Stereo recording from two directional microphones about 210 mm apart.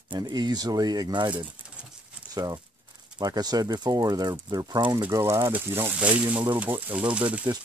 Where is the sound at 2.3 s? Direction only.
15° right (ahead or behind).